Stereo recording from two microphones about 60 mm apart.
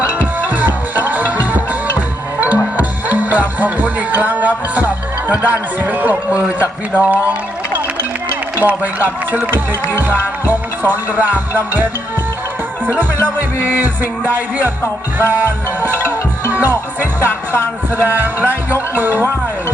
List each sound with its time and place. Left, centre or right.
0.1 s music: right
6.6 s speech: right
8.5 s music: right
12.8 s speech: right
13.2 s music: right